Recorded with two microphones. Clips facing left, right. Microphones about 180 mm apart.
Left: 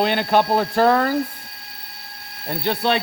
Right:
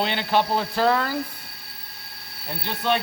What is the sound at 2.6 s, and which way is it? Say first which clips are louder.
Speech: left 4 dB; 70° left (ahead or behind).